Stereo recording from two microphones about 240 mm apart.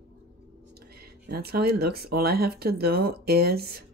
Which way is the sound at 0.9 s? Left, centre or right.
Right.